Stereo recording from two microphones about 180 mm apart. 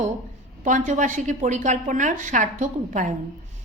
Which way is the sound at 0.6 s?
45° right (ahead or behind).